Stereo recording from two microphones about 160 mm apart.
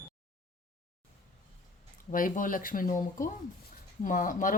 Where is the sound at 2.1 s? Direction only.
55° left (ahead or behind).